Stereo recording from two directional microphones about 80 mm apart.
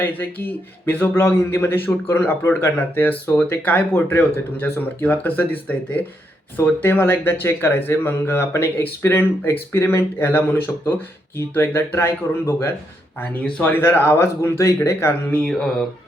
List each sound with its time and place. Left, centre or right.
0.0 s speech: left
15.4 s mantra: centre